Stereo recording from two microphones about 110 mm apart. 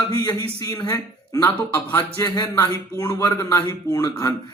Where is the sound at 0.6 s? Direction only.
35° left (ahead or behind).